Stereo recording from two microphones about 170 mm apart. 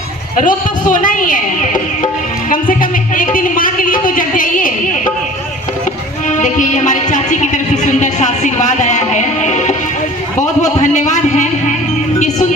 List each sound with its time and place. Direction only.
0.4 s speech: 50° left (ahead or behind)
2.5 s music: 55° left (ahead or behind)
6.2 s music: 45° left (ahead or behind)
10.6 s speech: 45° left (ahead or behind)